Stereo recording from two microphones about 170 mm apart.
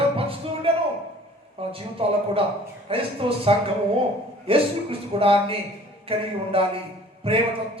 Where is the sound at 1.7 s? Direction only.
35° right (ahead or behind).